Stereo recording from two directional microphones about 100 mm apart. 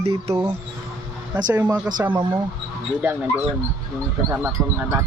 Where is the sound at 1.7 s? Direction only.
15° right (ahead or behind).